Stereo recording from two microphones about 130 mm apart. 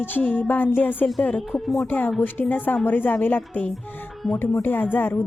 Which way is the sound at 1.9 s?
15° left (ahead or behind).